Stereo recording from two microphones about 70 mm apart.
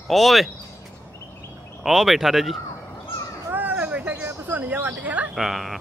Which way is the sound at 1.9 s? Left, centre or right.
Centre.